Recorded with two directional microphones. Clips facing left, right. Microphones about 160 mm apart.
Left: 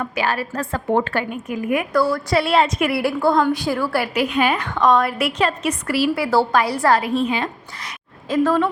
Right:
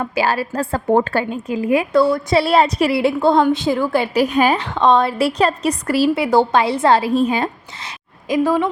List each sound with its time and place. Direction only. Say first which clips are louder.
0.0 s a woman's voice: right 4 dB; 30° right (ahead or behind)
1.2 s a woman's voice: right 4 dB; 25° right (ahead or behind)
4.1 s a woman's voice: right 5 dB; 40° right (ahead or behind)
4.6 s a woman's voice: right 2 dB; 25° right (ahead or behind)
6.1 s a woman's voice: right 3 dB; 20° right (ahead or behind)
7.1 s a woman's voice: right 4 dB; 40° right (ahead or behind)
8.3 s a woman's voice: right 1 dB; 15° right (ahead or behind)